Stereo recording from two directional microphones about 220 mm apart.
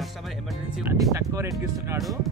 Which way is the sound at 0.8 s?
10° right (ahead or behind).